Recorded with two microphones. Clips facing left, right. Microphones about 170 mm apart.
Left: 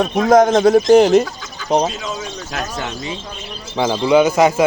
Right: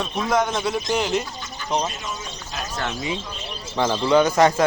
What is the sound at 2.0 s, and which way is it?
Speech, 90° left.